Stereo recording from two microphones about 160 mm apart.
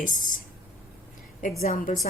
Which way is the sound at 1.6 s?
55° left (ahead or behind).